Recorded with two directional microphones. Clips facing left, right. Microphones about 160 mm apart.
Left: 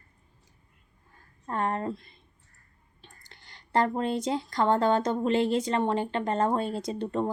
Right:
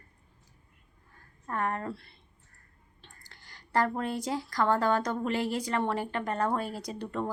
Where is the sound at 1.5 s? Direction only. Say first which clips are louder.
Left 3 dB; 25° left (ahead or behind).